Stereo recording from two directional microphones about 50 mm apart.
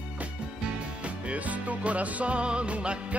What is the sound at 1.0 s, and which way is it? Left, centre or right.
Music, right.